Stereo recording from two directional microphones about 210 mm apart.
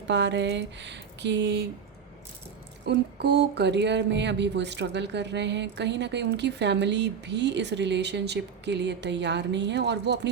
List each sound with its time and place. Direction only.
0.1 s speech: 55° right (ahead or behind)
2.8 s speech: 55° right (ahead or behind)